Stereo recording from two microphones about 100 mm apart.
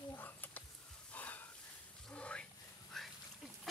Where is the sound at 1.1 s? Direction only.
15° left (ahead or behind).